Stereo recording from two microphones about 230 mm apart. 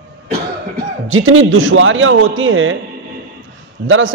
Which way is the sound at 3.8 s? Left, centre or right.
Right.